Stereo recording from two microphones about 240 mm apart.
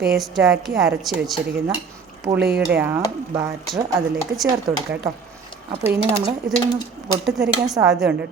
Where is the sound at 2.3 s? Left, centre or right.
Right.